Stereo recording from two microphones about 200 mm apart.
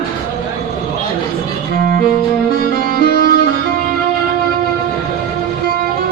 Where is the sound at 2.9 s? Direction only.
55° left (ahead or behind).